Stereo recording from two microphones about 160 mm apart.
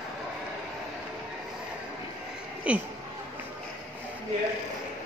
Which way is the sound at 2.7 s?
10° right (ahead or behind).